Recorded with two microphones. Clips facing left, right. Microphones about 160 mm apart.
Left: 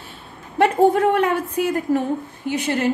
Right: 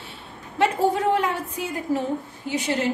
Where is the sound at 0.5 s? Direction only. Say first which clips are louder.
Left 6 dB; 55° left (ahead or behind).